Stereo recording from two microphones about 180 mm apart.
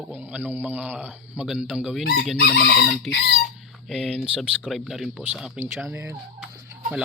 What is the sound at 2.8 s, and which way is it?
Speech, 5° left (ahead or behind).